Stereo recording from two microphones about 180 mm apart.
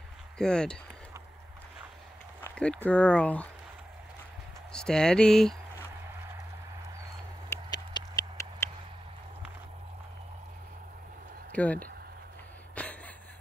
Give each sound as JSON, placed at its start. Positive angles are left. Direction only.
{"t": 0.4, "sound": "speech", "side_deg": 5}
{"t": 2.4, "sound": "speech", "side_deg": 5}
{"t": 4.7, "sound": "speech", "side_deg": 5}
{"t": 7.4, "sound": "a sound", "side_deg": 15}
{"t": 11.5, "sound": "speech", "side_deg": 10}
{"t": 12.7, "sound": "a sound", "side_deg": 5}